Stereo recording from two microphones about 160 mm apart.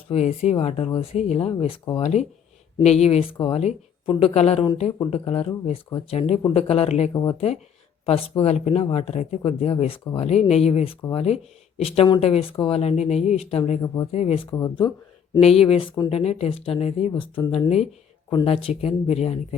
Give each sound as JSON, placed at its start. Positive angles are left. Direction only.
{"t": 0.1, "sound": "speech", "side_deg": 40}
{"t": 7.1, "sound": "speech", "side_deg": 25}
{"t": 7.3, "sound": "speech", "side_deg": 40}
{"t": 13.8, "sound": "speech", "side_deg": 20}
{"t": 14.1, "sound": "speech", "side_deg": 40}
{"t": 14.5, "sound": "speech", "side_deg": 25}
{"t": 15.4, "sound": "speech", "side_deg": 40}